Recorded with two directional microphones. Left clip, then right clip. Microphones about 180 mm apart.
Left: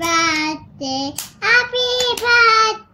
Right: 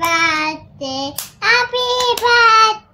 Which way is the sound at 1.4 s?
25° right (ahead or behind).